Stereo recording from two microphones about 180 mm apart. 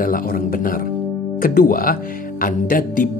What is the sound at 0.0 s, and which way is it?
Speech, 50° left (ahead or behind).